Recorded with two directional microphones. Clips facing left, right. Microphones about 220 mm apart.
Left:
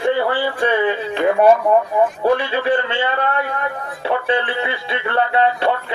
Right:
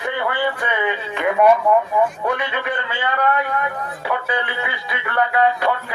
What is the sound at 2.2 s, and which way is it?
Music, 30° left (ahead or behind).